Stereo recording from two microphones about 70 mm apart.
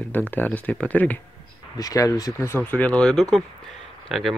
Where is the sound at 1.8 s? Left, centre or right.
Left.